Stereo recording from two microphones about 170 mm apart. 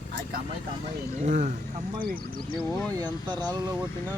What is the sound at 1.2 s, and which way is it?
Speech, 50° right (ahead or behind).